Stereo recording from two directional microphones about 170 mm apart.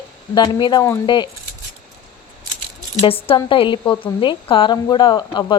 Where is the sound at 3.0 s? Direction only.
35° left (ahead or behind).